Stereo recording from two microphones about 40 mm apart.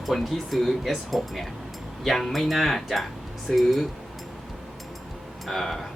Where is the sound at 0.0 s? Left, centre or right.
Centre.